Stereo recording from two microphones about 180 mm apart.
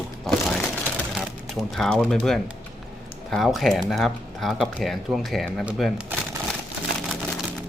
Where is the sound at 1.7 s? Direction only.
Centre (ahead or behind).